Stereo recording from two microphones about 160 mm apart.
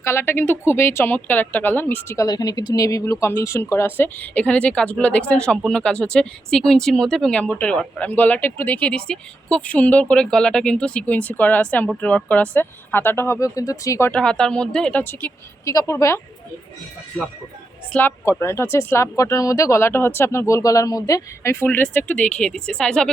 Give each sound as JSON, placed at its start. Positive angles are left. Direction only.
{"t": 0.0, "sound": "speech", "side_deg": 15}
{"t": 14.1, "sound": "speech", "side_deg": 5}
{"t": 17.9, "sound": "speech", "side_deg": 10}